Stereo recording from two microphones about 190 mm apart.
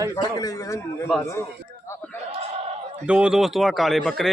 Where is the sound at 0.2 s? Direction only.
20° left (ahead or behind).